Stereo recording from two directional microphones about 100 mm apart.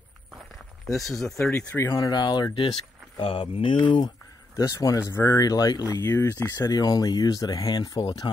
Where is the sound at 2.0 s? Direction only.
45° left (ahead or behind).